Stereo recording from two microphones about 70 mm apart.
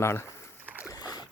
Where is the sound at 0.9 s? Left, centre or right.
Left.